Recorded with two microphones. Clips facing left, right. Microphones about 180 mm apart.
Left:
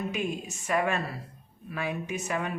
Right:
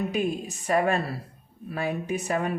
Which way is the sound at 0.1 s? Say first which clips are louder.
Right 5 dB; 35° right (ahead or behind).